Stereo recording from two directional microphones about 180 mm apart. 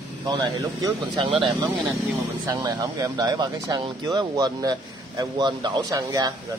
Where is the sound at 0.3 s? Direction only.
20° right (ahead or behind).